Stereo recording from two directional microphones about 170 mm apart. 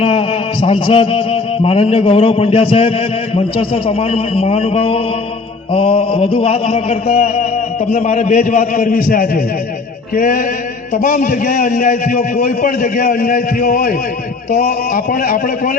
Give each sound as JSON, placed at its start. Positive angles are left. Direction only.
{"t": 0.0, "sound": "a sound", "side_deg": 35}
{"t": 3.3, "sound": "a man's voice", "side_deg": 35}
{"t": 10.2, "sound": "mantra", "side_deg": 55}
{"t": 11.0, "sound": "a man's voice", "side_deg": 55}